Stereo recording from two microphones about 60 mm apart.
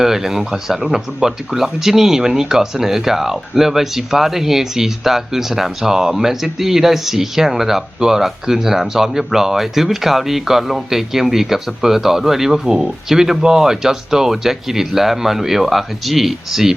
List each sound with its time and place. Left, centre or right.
0.0 s speech: centre